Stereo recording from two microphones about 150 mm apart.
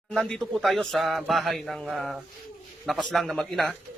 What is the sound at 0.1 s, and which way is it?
A man's voice, 5° left (ahead or behind).